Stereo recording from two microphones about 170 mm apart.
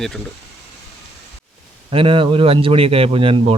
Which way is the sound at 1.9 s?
30° right (ahead or behind).